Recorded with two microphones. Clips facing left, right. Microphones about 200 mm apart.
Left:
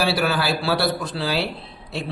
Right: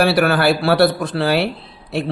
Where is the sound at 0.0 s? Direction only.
55° right (ahead or behind).